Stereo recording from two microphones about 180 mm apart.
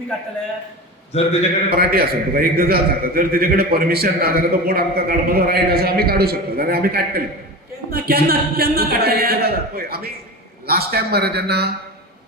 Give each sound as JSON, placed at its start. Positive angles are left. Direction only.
{"t": 1.1, "sound": "a man's voice", "side_deg": 35}
{"t": 1.7, "sound": "a man's voice", "side_deg": -55}